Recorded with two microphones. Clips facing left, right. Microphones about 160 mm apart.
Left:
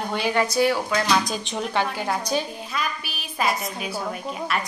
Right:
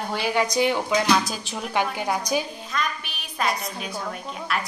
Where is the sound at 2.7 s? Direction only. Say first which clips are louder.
Even; 5° left (ahead or behind).